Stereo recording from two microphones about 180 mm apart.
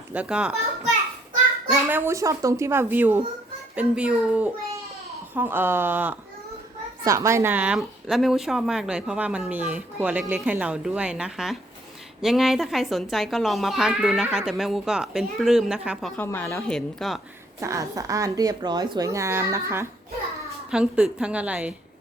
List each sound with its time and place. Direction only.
0.1 s a woman's voice: 5° right (ahead or behind)
1.7 s a woman's voice: 10° right (ahead or behind)
16.2 s speech: 10° left (ahead or behind)
17.6 s a woman's voice: 15° right (ahead or behind)